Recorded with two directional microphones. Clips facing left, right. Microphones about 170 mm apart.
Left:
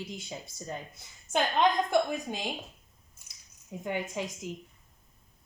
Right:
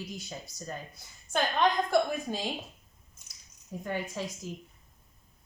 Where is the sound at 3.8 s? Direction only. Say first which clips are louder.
Left 1 dB; 20° left (ahead or behind).